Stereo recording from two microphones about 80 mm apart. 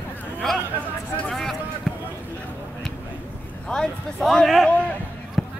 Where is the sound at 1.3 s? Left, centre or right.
Centre.